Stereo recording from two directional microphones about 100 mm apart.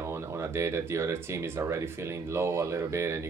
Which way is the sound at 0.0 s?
25° right (ahead or behind).